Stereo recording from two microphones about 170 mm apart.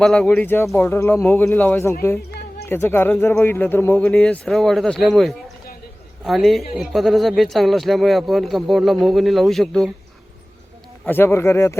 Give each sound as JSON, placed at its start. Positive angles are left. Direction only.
{"t": 0.0, "sound": "speech", "side_deg": 5}
{"t": 11.1, "sound": "speech", "side_deg": 15}